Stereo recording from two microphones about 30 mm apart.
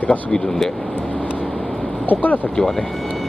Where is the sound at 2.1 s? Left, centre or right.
Left.